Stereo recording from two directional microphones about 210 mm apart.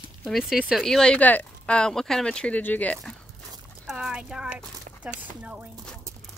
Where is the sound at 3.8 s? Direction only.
5° right (ahead or behind).